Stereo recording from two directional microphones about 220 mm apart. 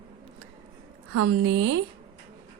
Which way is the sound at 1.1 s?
90° right.